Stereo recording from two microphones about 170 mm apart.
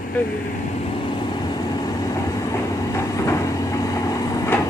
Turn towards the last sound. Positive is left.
turn(degrees=15)  # may be behind; listen again after turning